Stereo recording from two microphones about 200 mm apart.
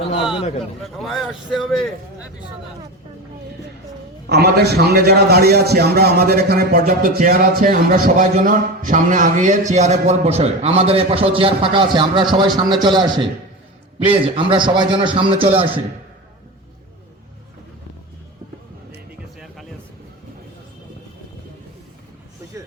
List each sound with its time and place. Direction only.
0.0 s a sound: 25° left (ahead or behind)
0.8 s a man's voice: centre (ahead or behind)
4.3 s a man's voice: 50° right (ahead or behind); by 15.7 s 25° right (ahead or behind)